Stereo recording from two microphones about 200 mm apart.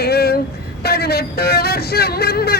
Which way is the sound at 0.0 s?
50° left (ahead or behind).